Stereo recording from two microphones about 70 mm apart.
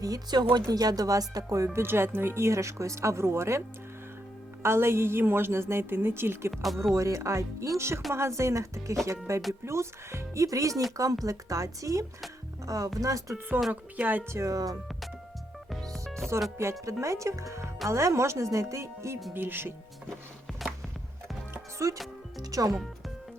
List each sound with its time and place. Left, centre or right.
0.0 s speech: right
4.6 s a woman's voice: right
6.5 s speech: centre
6.9 s speech: right
13.9 s speech: right
14.3 s speech: right
15.7 s music: centre
16.8 s speech: right
19.3 s a woman's voice: right
20.6 s music: centre
21.5 s music: right
22.4 s speech: right